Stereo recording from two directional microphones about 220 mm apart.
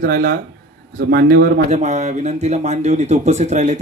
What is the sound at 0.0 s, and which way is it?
Speech, 40° right (ahead or behind).